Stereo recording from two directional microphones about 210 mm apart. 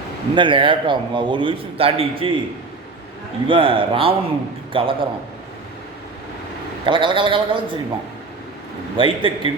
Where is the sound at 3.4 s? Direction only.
25° right (ahead or behind).